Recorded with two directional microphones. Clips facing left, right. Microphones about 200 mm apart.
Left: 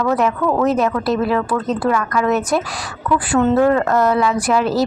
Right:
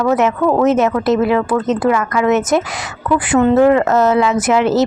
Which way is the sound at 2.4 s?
20° right (ahead or behind).